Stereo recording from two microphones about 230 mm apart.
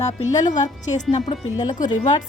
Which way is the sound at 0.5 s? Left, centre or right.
Left.